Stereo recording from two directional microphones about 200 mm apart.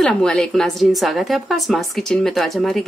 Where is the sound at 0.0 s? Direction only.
5° left (ahead or behind).